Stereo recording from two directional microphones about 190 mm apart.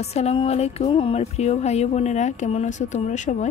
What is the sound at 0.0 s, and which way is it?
A woman's voice, 35° left (ahead or behind).